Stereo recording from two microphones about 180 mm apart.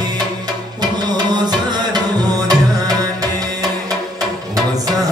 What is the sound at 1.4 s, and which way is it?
Music, 25° right (ahead or behind).